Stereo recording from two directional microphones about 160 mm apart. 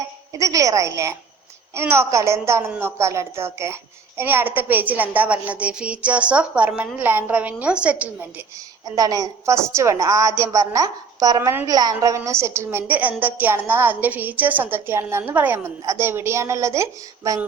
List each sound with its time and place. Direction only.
0.3 s a woman's voice: 20° right (ahead or behind)
8.8 s a woman's voice: 25° right (ahead or behind)